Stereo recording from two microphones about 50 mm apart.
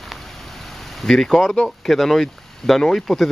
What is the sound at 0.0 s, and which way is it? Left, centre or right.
Vehicle, centre.